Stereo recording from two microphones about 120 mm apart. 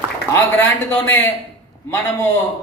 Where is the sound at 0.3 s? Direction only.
15° left (ahead or behind).